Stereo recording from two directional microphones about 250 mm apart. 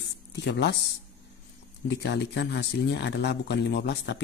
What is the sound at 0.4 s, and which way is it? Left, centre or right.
Speech, left.